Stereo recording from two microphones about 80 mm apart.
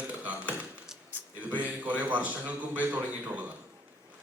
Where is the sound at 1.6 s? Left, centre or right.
Centre.